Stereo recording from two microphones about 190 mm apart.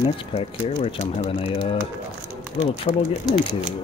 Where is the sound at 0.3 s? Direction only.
30° left (ahead or behind).